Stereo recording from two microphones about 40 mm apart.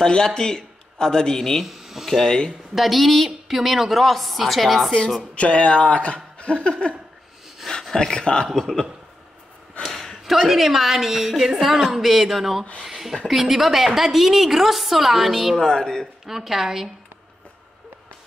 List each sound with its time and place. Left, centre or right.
0.0 s a man's voice: centre
1.6 s speech: centre
2.0 s speech: centre
2.7 s a woman's voice: centre
5.3 s speech: left
6.1 s laughter: left
7.9 s speech: centre
9.8 s a sound: centre
10.3 s a woman's voice: centre
15.6 s speech: centre
16.3 s a woman's voice: centre